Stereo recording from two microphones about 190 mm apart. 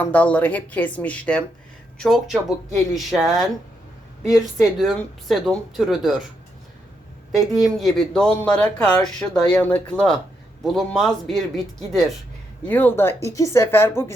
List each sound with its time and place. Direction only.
0.0 s speech: 10° left (ahead or behind)
4.6 s speech: centre (ahead or behind)
7.6 s speech: centre (ahead or behind)